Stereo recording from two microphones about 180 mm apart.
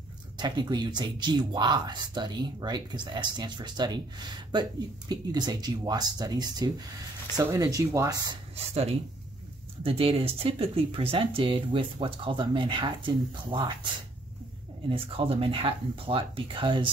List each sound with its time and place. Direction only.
0.4 s speech: 25° right (ahead or behind)
8.5 s speech: 35° right (ahead or behind)
14.9 s speech: 30° right (ahead or behind)